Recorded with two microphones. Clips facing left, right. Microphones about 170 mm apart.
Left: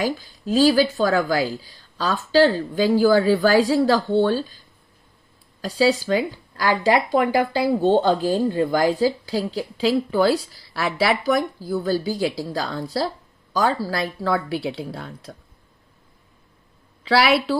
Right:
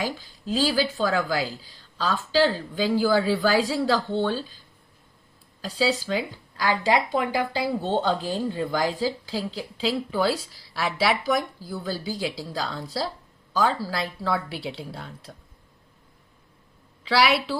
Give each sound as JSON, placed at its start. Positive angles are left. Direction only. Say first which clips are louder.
{"t": 0.0, "sound": "speech", "louder": "left 6 dB", "side_deg": 45}
{"t": 5.6, "sound": "speech", "louder": "left 6 dB", "side_deg": 45}
{"t": 17.0, "sound": "a woman's voice", "louder": "left 4 dB", "side_deg": 55}